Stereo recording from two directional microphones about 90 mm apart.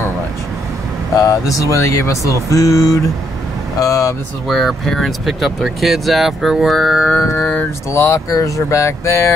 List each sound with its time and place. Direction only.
1.1 s speech: 40° left (ahead or behind)
4.5 s speech: 5° left (ahead or behind)
7.1 s mantra: 5° left (ahead or behind)
7.9 s speech: 30° left (ahead or behind)